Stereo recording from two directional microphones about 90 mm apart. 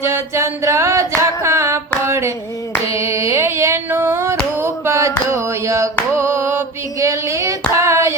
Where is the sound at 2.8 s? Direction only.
35° right (ahead or behind).